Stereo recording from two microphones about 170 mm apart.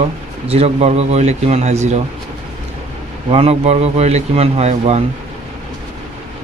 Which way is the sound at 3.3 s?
35° right (ahead or behind).